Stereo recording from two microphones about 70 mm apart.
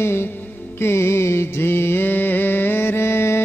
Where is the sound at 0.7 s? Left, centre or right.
Left.